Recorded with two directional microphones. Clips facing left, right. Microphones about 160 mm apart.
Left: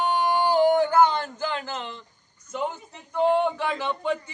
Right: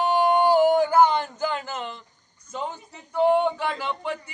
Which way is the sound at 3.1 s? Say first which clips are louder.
Right 2 dB; 15° right (ahead or behind).